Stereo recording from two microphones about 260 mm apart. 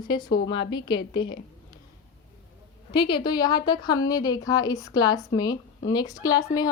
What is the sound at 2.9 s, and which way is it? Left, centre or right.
Speech, centre.